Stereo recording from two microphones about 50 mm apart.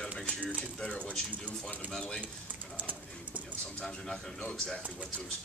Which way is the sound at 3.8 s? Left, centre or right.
Centre.